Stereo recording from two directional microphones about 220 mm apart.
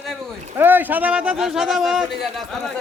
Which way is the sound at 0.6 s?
10° right (ahead or behind).